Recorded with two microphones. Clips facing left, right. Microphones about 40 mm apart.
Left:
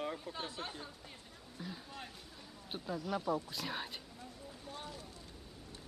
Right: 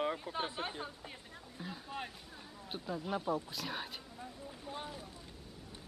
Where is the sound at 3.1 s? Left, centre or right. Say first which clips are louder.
Even; centre.